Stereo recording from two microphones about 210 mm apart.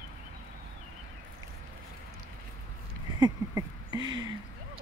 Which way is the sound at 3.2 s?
15° right (ahead or behind).